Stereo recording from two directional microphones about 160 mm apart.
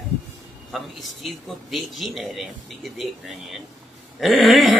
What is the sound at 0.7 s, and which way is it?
A man's voice, centre (ahead or behind).